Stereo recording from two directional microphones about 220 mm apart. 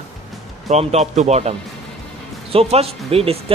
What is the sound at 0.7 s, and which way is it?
Speech, 30° right (ahead or behind).